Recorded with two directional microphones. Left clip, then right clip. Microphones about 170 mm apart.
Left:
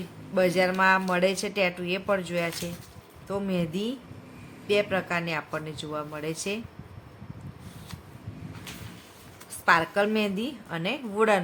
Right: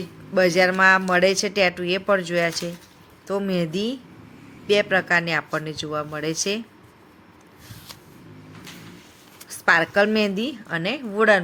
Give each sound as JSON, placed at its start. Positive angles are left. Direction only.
{"t": 0.3, "sound": "speech", "side_deg": -10}
{"t": 9.6, "sound": "speech", "side_deg": -15}